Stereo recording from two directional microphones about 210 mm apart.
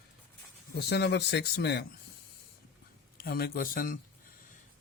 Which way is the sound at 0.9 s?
55° left (ahead or behind).